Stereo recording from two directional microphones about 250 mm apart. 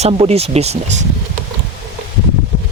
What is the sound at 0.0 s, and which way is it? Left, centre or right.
Speech, right.